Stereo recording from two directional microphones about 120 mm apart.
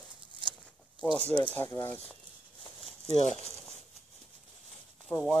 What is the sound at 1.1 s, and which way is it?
Speech, 10° left (ahead or behind).